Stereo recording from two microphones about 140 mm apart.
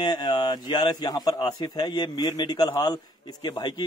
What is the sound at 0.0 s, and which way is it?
Speech, 30° left (ahead or behind).